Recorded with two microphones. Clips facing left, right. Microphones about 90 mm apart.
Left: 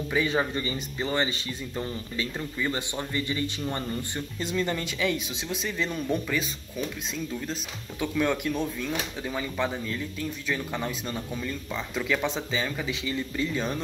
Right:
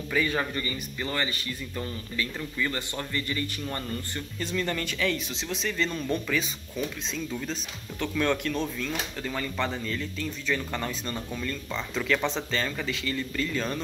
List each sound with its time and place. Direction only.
0.1 s speech: 20° left (ahead or behind)
8.0 s speech: 10° left (ahead or behind)